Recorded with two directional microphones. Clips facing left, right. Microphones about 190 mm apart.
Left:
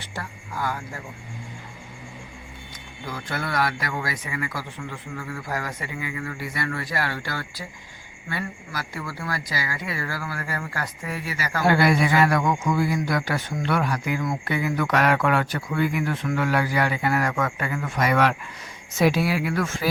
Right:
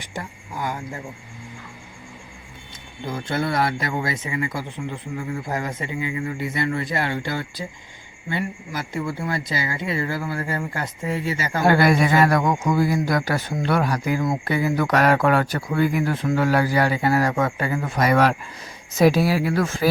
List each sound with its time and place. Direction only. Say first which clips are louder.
0.0 s speech: right 2 dB; 20° right (ahead or behind)
3.1 s speech: right 5 dB; 25° right (ahead or behind)
11.6 s speech: right 2 dB; 45° right (ahead or behind)